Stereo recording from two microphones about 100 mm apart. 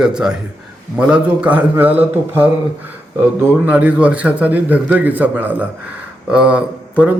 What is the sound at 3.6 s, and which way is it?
Speech, 15° right (ahead or behind).